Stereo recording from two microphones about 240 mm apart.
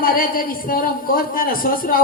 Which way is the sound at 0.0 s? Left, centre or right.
Left.